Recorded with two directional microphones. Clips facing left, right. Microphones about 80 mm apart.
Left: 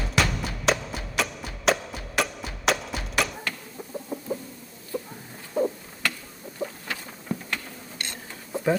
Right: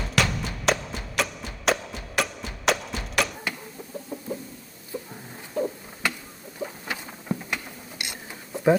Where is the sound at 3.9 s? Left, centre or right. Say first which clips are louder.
Left 2 dB; centre.